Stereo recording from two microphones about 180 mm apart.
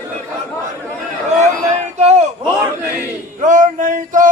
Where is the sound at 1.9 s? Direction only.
40° right (ahead or behind).